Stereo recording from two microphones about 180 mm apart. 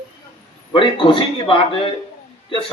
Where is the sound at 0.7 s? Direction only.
30° left (ahead or behind).